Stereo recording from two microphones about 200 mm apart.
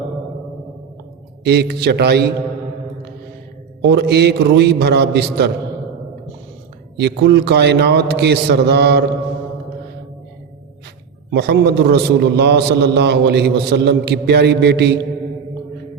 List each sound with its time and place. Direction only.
1.5 s a man's voice: 55° right (ahead or behind)
3.8 s a man's voice: 60° right (ahead or behind)
6.9 s a man's voice: 55° right (ahead or behind)
11.3 s a man's voice: 55° right (ahead or behind)